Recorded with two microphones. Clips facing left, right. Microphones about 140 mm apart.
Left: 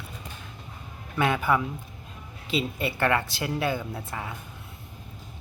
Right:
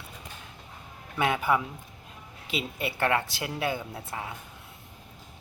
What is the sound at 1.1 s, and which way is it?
Speech, 15° right (ahead or behind).